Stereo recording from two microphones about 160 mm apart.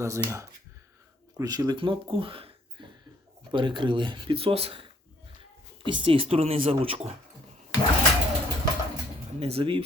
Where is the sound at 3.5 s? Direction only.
30° right (ahead or behind).